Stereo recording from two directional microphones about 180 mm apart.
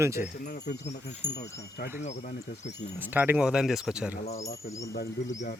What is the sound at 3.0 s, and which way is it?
Speech, 10° right (ahead or behind).